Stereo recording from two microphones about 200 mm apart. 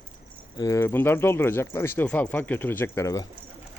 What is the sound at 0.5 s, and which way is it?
Speech, 15° left (ahead or behind).